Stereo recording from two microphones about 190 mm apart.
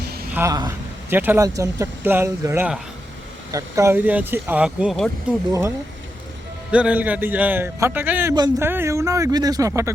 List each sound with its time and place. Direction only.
0.3 s a man's voice: 20° right (ahead or behind); by 5.1 s centre (ahead or behind)
5.5 s a man's voice: 15° right (ahead or behind)
6.7 s a man's voice: 5° right (ahead or behind)